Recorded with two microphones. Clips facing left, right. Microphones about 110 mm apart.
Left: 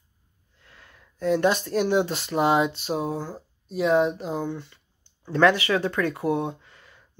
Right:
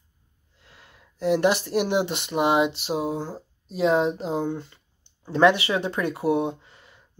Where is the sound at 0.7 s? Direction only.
25° right (ahead or behind).